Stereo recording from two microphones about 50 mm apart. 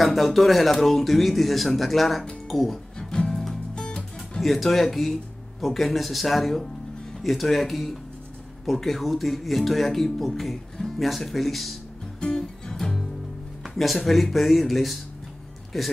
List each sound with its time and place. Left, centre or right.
0.0 s speech: centre
2.4 s music: centre
4.4 s speech: centre
12.2 s music: centre
13.7 s speech: centre